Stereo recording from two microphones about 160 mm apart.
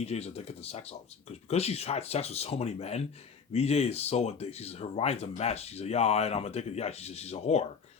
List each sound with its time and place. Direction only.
0.0 s speech: 40° left (ahead or behind)